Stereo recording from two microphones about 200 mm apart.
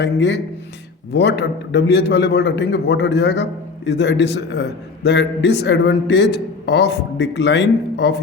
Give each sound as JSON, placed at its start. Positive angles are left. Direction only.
{"t": 0.0, "sound": "a man's voice", "side_deg": 60}